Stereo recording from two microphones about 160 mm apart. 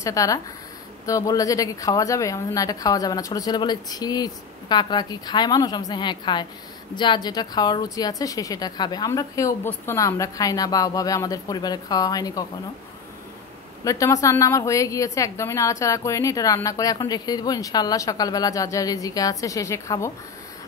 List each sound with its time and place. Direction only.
0.0 s a woman's voice: 20° left (ahead or behind)
13.8 s a woman's voice: 20° left (ahead or behind)